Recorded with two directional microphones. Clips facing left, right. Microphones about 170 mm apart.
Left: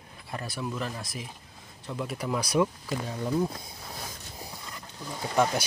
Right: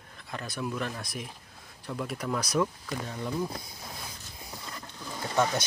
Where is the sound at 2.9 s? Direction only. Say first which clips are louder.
Left 4 dB; 20° left (ahead or behind).